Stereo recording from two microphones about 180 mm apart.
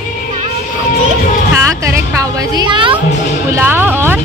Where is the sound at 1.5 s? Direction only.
15° right (ahead or behind).